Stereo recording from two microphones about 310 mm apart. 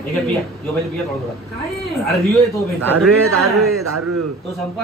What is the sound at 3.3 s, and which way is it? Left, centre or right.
Speech, right.